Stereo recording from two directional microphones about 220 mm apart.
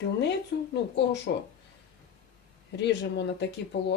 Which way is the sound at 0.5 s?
50° left (ahead or behind).